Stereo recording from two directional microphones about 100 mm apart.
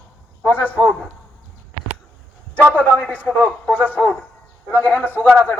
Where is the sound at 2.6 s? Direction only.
15° right (ahead or behind).